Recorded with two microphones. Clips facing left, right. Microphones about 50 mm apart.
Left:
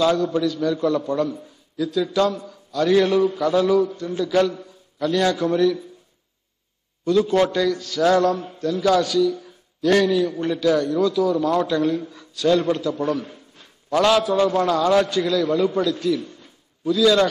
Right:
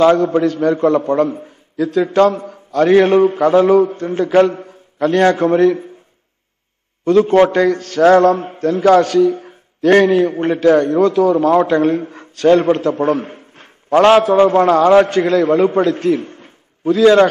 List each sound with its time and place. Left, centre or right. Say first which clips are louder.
0.0 s a man's voice: right 8 dB; right
7.1 s a man's voice: right 7 dB; right